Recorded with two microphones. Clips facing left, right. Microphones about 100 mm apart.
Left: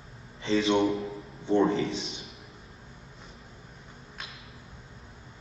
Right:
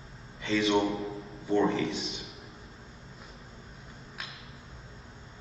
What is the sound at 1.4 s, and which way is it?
Speech, 30° left (ahead or behind).